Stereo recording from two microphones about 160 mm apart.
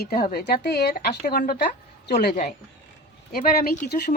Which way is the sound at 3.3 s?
70° left (ahead or behind).